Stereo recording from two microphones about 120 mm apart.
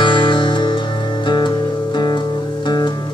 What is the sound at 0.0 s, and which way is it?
Music, 40° left (ahead or behind).